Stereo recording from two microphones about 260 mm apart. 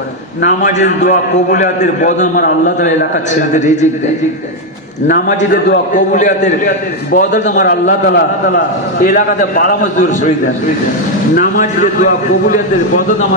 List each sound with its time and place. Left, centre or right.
0.4 s a man's voice: left
5.0 s a man's voice: left
11.3 s a man's voice: left